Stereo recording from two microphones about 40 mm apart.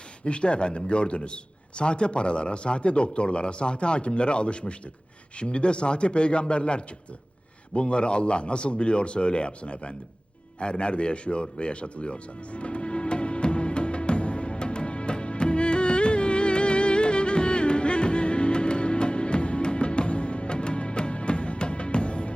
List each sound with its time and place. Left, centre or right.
0.3 s a man's voice: left
10.6 s music: left